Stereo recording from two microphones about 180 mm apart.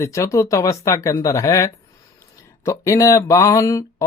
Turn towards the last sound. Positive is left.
turn(degrees=15)  # may be behind; listen again after turning